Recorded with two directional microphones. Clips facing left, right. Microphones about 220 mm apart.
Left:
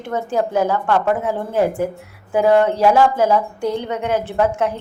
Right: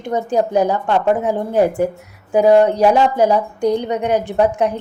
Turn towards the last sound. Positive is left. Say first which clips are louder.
# right 3 dB
turn(degrees=-15)  # may be behind; listen again after turning